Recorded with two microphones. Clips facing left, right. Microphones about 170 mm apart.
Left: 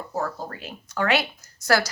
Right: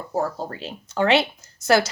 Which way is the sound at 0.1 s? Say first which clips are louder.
Right 5 dB; 25° right (ahead or behind).